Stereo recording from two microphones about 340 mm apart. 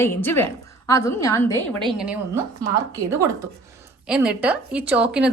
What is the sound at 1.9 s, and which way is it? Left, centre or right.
A woman's voice, centre.